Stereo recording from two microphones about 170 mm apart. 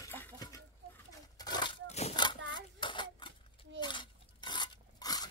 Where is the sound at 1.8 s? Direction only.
40° left (ahead or behind).